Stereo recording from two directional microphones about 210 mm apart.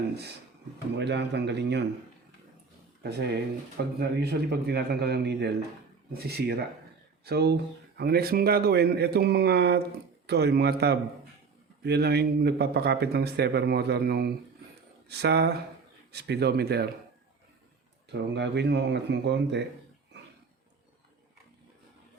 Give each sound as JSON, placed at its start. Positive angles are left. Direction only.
{"t": 0.9, "sound": "speech", "side_deg": -55}
{"t": 3.0, "sound": "speech", "side_deg": -50}
{"t": 18.1, "sound": "speech", "side_deg": -55}